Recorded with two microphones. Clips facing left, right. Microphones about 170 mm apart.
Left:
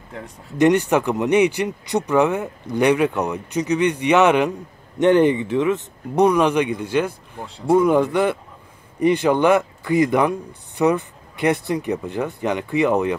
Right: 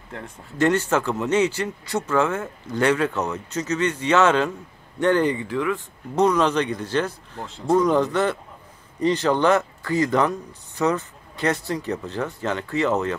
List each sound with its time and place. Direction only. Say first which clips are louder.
0.6 s speech: left 4 dB; 15° left (ahead or behind)
7.4 s speech: left 3 dB; centre (ahead or behind)
7.7 s speech: left 3 dB; 10° left (ahead or behind)